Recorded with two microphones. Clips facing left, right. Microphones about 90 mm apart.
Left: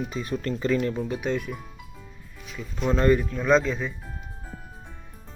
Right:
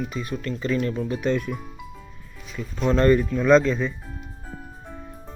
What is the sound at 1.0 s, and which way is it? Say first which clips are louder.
Speech: right 3 dB; 15° left (ahead or behind).